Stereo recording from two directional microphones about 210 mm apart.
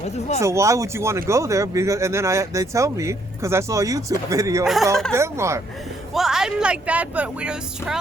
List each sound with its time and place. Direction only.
0.0 s speech: 30° left (ahead or behind)
0.4 s speech: 15° right (ahead or behind)
4.6 s speech: centre (ahead or behind)
5.1 s speech: 15° right (ahead or behind)
6.1 s speech: centre (ahead or behind)